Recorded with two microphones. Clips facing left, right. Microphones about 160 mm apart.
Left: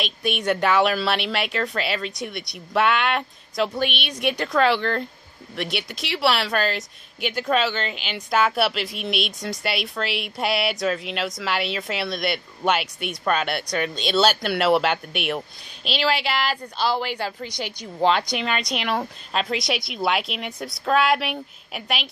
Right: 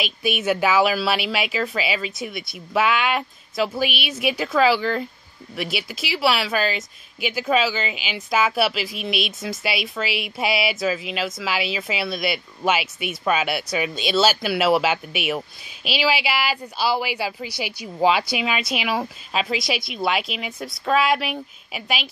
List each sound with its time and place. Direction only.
0.0 s a woman's voice: 5° right (ahead or behind)